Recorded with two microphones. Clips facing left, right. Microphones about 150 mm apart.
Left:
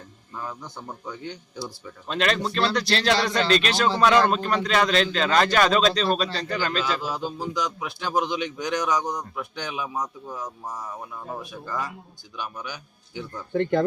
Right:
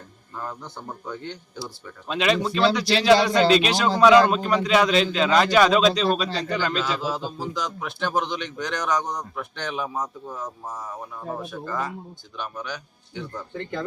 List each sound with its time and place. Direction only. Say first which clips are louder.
1.2 s a man's voice: even; centre (ahead or behind)
12.4 s a man's voice: right 2 dB; 5° left (ahead or behind)
13.5 s speech: left 11 dB; 45° left (ahead or behind)